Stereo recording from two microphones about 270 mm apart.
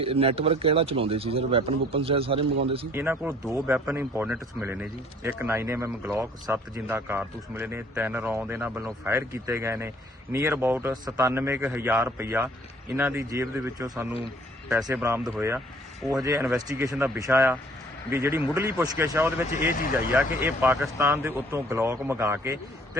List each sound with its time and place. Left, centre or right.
0.0 s speech: right
2.9 s speech: centre